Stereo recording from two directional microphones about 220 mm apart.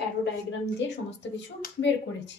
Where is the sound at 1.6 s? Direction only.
55° left (ahead or behind).